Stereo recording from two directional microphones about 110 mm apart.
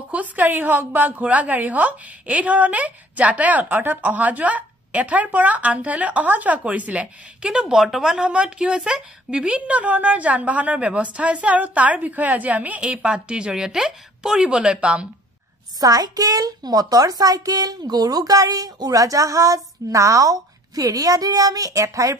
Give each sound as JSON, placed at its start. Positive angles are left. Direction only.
{"t": 0.1, "sound": "a woman's voice", "side_deg": -15}
{"t": 15.8, "sound": "a child's voice", "side_deg": -35}